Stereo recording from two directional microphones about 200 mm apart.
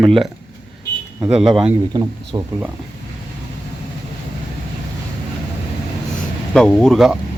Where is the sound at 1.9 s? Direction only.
25° right (ahead or behind).